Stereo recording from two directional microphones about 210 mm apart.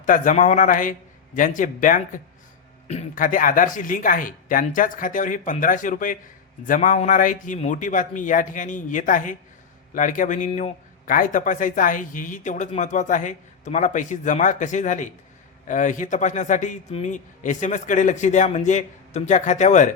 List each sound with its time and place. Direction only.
0.0 s a man's voice: 40° left (ahead or behind)